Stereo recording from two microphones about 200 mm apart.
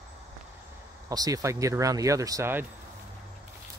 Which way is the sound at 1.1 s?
15° right (ahead or behind).